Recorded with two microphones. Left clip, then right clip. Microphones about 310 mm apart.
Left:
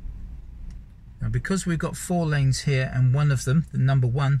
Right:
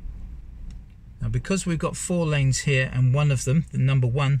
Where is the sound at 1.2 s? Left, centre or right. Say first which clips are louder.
Right 1 dB; centre.